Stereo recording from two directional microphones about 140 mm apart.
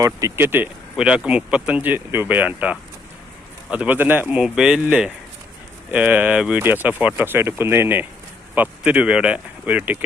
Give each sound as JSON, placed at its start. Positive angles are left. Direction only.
{"t": 0.0, "sound": "speech", "side_deg": -25}